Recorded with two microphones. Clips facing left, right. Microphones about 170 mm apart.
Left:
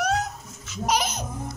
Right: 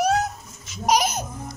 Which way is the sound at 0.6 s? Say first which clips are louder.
Right 4 dB; 15° right (ahead or behind).